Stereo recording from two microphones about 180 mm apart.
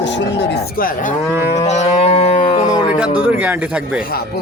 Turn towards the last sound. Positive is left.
turn(degrees=-5)  # may be behind; listen again after turning